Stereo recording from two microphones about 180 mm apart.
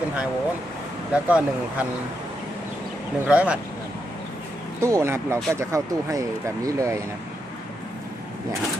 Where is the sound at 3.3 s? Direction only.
10° right (ahead or behind).